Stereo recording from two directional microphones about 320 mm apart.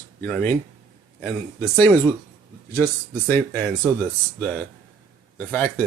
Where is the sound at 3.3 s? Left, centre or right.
Centre.